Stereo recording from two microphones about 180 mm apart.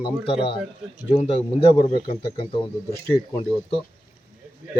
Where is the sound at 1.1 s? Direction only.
35° left (ahead or behind).